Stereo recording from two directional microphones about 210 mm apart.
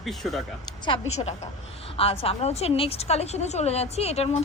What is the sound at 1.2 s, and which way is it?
A woman's voice, 30° left (ahead or behind).